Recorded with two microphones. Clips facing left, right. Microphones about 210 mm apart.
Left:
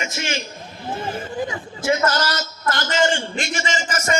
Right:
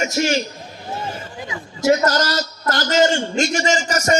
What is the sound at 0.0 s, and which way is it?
Speech, 40° right (ahead or behind).